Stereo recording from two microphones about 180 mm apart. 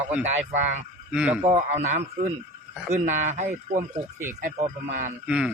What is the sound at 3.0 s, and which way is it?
Speech, 45° right (ahead or behind).